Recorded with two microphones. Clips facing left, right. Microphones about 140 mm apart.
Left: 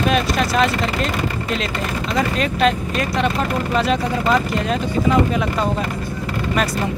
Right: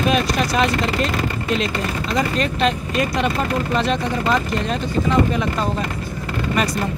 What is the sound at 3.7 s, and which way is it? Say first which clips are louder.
Speech: left 3 dB; centre (ahead or behind).